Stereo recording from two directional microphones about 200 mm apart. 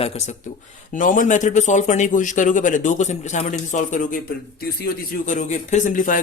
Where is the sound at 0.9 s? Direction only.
40° left (ahead or behind).